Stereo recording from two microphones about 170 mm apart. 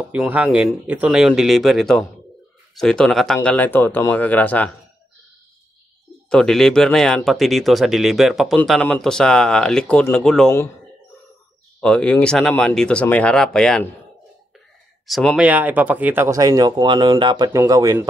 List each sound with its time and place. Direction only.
0.3 s speech: 5° right (ahead or behind); by 4.7 s 10° left (ahead or behind)
6.3 s speech: 5° left (ahead or behind)
11.8 s speech: 5° left (ahead or behind)
15.0 s speech: centre (ahead or behind); by 18.0 s 20° right (ahead or behind)